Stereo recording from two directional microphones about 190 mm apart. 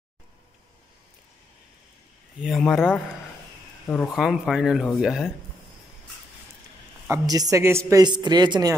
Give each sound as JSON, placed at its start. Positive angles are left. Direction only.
{"t": 2.4, "sound": "speech", "side_deg": 0}
{"t": 4.1, "sound": "speech", "side_deg": 0}
{"t": 7.1, "sound": "a man's voice", "side_deg": -20}